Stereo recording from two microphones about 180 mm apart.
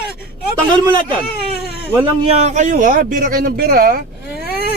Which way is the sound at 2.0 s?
35° right (ahead or behind).